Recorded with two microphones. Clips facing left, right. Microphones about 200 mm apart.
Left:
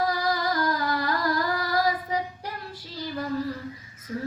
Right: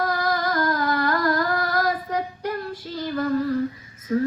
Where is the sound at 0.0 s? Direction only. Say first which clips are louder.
Right 2 dB; 55° right (ahead or behind).